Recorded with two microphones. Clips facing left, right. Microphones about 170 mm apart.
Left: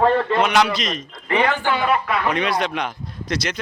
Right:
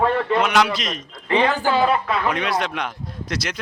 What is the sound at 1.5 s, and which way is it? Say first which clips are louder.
Speech: right 1 dB; 35° right (ahead or behind).